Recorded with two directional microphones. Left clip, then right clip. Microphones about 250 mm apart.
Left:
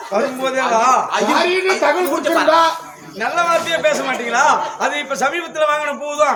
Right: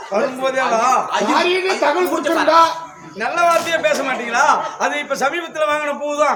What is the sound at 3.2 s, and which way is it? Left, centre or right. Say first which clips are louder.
A man's voice: right 1 dB; centre.